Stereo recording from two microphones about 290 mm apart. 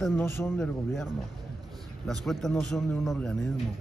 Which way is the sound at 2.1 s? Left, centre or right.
Centre.